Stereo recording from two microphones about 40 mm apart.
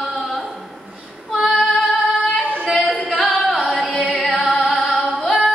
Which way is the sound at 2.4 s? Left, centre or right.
Left.